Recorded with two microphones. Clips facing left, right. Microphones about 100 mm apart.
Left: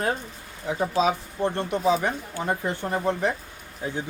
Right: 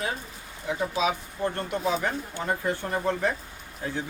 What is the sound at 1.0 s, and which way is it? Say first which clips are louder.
Speech: left 5 dB; 30° left (ahead or behind).